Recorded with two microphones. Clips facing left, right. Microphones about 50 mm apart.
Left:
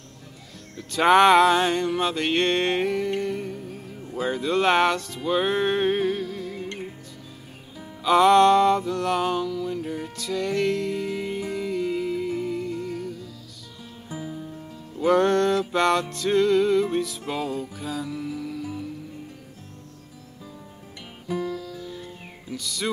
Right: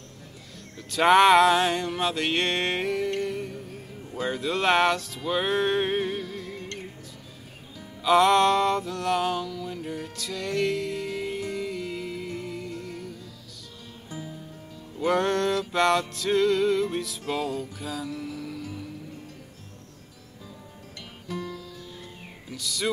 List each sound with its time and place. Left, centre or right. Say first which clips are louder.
0.7 s music: left 1 dB; centre
7.8 s music: left 2 dB; centre
15.0 s music: left 4 dB; centre
21.3 s music: left 6 dB; centre
22.0 s music: left 3 dB; centre